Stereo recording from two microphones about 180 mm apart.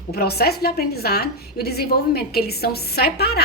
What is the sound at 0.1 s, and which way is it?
A woman's voice, 60° left (ahead or behind).